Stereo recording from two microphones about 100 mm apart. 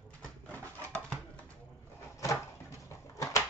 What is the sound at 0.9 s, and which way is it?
Pigeon, 15° left (ahead or behind).